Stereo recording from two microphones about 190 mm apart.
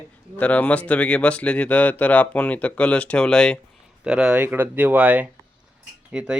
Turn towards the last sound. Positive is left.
turn(degrees=-5)  # may be behind; listen again after turning